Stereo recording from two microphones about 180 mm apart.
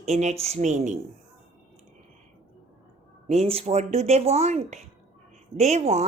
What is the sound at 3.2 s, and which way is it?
A woman's voice, 35° right (ahead or behind).